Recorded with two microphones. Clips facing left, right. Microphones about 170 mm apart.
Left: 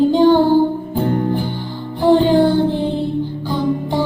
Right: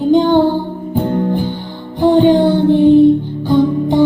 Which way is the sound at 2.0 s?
15° right (ahead or behind).